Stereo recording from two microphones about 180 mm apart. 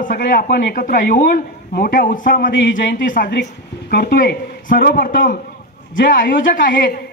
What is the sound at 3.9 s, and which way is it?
Speech, 60° left (ahead or behind).